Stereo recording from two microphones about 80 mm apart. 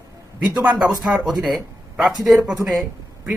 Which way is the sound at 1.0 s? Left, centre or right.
Centre.